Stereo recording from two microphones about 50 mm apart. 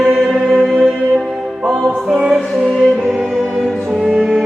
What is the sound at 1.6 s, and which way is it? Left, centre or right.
Music, centre.